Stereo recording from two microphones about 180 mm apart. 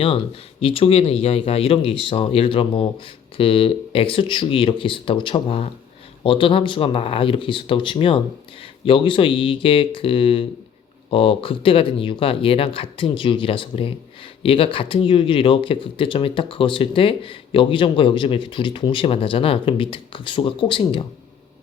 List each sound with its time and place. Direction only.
0.6 s speech: 30° left (ahead or behind)